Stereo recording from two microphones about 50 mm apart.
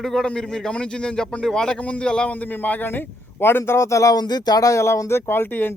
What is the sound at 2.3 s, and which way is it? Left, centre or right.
A man's voice, left.